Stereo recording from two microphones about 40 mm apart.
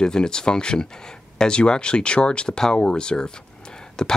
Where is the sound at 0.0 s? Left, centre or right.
Centre.